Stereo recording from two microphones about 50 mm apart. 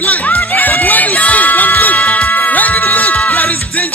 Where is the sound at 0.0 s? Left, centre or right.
Left.